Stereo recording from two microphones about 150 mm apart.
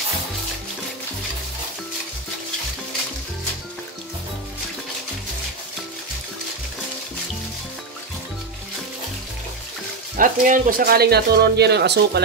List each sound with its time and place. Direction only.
10.1 s speech: 60° right (ahead or behind); by 12.2 s 90° right